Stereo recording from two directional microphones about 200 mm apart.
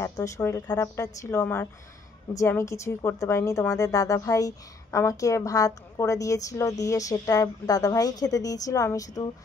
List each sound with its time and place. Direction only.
0.0 s a woman's voice: 15° left (ahead or behind)